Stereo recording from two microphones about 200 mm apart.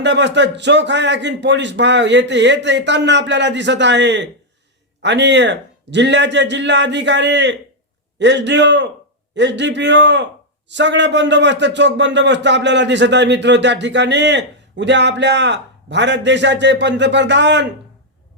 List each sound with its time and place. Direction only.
0.0 s speech: 60° right (ahead or behind)